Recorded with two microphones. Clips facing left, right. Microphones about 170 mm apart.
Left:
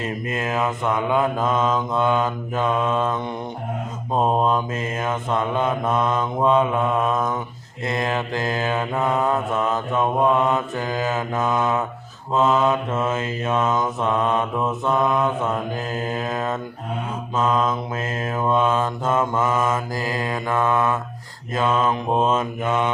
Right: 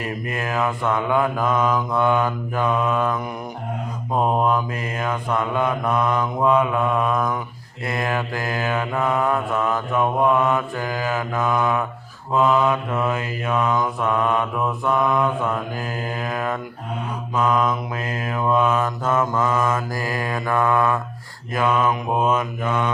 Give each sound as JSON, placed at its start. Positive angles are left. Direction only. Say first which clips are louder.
{"t": 0.0, "sound": "mantra", "louder": "left 1 dB", "side_deg": 20}